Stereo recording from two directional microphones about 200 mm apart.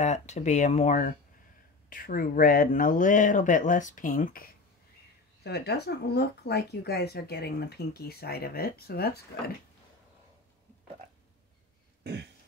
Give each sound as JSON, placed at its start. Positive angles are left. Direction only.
{"t": 0.0, "sound": "speech", "side_deg": 35}
{"t": 12.0, "sound": "throat clearing", "side_deg": -55}